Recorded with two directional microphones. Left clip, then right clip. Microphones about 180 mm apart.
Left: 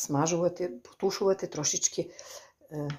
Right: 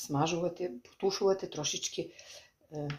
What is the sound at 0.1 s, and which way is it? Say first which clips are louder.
Speech: left 4 dB; 40° left (ahead or behind).